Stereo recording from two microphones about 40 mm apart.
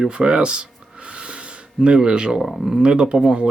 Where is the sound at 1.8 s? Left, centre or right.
Right.